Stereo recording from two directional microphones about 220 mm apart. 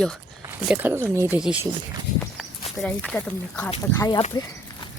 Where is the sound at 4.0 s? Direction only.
20° left (ahead or behind).